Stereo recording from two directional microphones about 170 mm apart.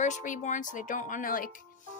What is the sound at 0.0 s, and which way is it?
A woman's voice, 45° left (ahead or behind).